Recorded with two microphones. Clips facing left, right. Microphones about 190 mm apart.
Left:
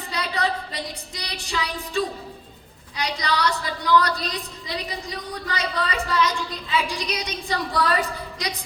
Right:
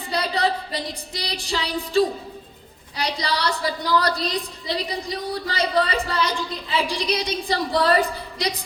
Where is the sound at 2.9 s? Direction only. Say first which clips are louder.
Even; 35° right (ahead or behind).